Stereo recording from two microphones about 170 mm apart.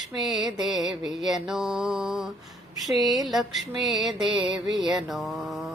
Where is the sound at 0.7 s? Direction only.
Centre (ahead or behind).